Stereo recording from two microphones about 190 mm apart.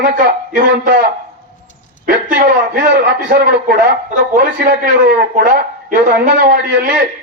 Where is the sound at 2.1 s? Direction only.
50° right (ahead or behind).